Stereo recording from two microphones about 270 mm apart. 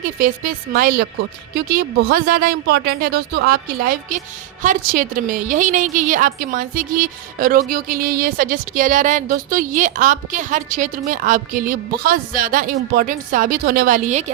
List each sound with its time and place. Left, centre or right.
0.2 s a woman's voice: right